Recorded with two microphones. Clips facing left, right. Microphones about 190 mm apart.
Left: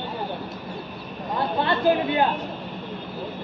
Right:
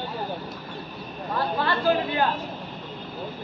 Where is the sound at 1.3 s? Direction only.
20° left (ahead or behind).